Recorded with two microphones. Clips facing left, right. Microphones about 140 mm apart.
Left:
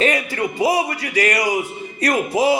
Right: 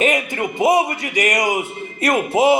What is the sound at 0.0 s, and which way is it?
A man's voice, 20° right (ahead or behind).